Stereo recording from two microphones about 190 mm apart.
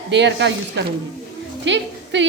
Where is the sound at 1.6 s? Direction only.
70° right (ahead or behind).